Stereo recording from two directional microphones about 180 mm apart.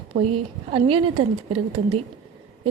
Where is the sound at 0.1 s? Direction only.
35° right (ahead or behind).